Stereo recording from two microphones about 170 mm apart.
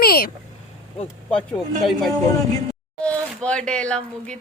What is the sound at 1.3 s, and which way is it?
Speech, 5° left (ahead or behind).